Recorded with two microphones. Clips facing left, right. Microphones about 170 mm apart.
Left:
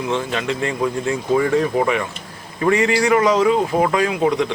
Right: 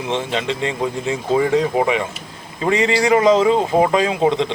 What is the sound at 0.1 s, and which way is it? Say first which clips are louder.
A man's voice: right 2 dB; 20° right (ahead or behind).